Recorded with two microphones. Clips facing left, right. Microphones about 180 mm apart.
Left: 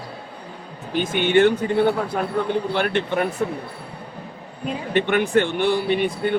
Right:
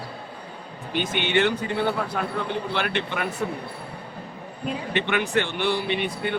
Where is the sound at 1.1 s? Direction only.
50° left (ahead or behind).